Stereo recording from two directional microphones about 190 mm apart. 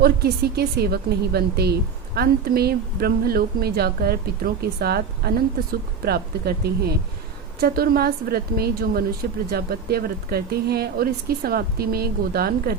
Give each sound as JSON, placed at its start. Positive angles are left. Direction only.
{"t": 0.0, "sound": "a woman's voice", "side_deg": -55}